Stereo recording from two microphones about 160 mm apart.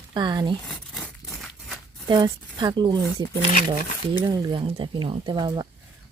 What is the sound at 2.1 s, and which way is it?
Speech, 30° right (ahead or behind).